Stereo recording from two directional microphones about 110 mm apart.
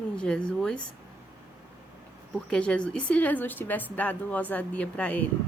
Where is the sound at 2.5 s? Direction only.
10° left (ahead or behind).